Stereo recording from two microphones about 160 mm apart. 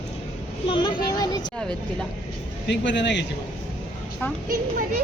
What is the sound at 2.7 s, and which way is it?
Speech, 90° left.